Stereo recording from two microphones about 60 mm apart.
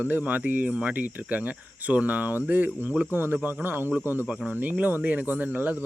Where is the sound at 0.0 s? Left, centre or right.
Right.